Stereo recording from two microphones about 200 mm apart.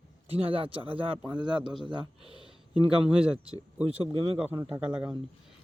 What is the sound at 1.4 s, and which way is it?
Speech, 20° right (ahead or behind).